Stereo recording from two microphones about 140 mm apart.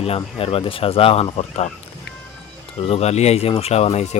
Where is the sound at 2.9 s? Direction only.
50° left (ahead or behind).